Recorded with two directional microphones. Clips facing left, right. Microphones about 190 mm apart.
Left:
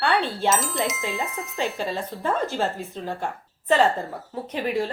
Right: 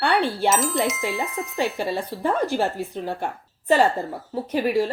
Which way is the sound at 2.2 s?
15° right (ahead or behind).